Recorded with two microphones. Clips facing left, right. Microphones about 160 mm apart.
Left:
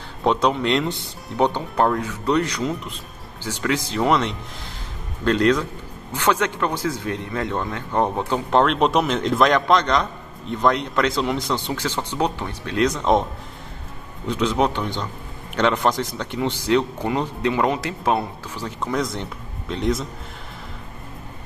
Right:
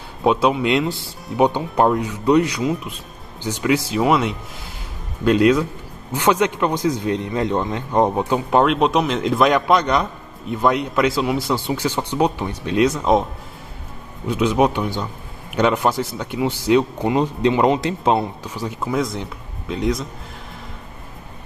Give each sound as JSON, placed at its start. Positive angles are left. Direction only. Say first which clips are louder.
{"t": 0.2, "sound": "speech", "louder": "right 3 dB", "side_deg": -10}
{"t": 18.5, "sound": "speech", "louder": "right 1 dB", "side_deg": -10}